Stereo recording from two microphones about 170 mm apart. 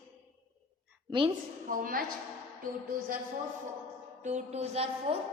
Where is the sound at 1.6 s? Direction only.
55° right (ahead or behind).